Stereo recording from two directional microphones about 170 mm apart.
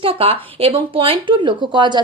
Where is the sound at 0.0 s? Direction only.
35° right (ahead or behind).